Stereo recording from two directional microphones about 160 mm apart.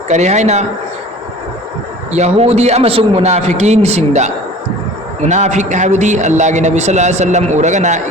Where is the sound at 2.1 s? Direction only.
40° right (ahead or behind).